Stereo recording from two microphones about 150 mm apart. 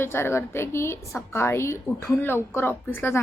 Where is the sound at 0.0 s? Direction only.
15° left (ahead or behind).